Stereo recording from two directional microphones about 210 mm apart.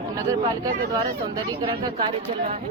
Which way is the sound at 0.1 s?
15° right (ahead or behind).